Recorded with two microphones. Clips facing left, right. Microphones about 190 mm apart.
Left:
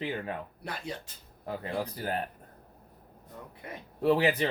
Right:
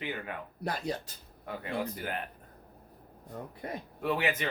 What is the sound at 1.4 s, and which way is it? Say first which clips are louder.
Speech: left 1 dB; 35° left (ahead or behind).